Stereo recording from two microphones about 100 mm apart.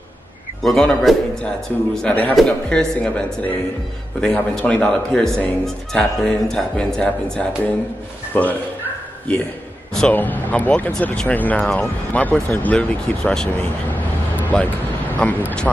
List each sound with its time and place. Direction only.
0.6 s a man's voice: 5° left (ahead or behind)
10.1 s speech: 15° left (ahead or behind)
14.5 s speech: 10° left (ahead or behind)